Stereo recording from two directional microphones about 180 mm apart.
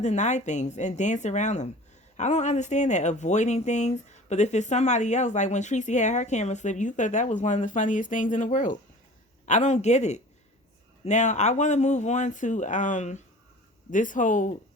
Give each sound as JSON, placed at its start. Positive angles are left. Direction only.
{"t": 0.0, "sound": "speech", "side_deg": 40}